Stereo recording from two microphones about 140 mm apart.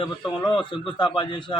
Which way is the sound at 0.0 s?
35° left (ahead or behind).